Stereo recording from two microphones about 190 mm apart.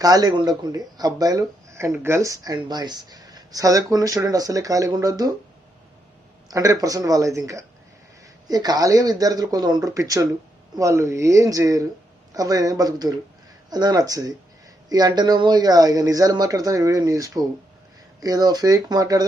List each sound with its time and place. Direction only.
0.0 s speech: 20° right (ahead or behind)
6.5 s speech: 20° right (ahead or behind)